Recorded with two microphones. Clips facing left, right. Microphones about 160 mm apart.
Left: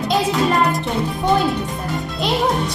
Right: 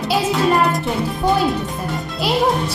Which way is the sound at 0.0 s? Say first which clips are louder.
Even; centre (ahead or behind).